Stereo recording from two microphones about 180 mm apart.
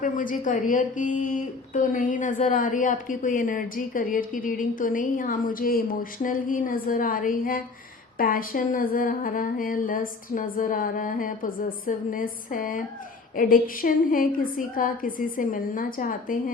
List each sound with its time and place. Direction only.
0.0 s speech: 45° left (ahead or behind)